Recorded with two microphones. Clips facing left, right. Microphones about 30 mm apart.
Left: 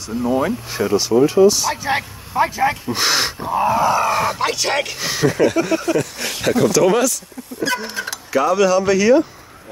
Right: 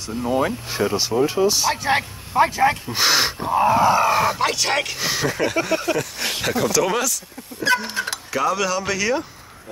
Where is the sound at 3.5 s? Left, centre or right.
Right.